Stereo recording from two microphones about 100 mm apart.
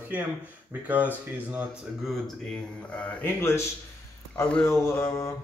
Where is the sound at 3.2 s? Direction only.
25° left (ahead or behind).